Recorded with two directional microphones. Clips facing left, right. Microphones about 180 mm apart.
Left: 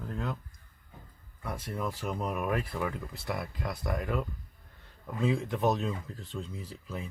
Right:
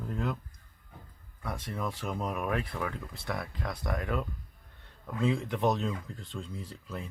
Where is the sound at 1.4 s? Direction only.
Centre (ahead or behind).